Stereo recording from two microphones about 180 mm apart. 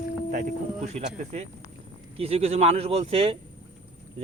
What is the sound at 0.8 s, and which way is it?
Speech, 35° right (ahead or behind).